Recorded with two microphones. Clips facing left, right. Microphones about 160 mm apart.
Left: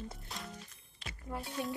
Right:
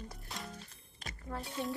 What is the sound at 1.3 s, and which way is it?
Speech, 15° left (ahead or behind).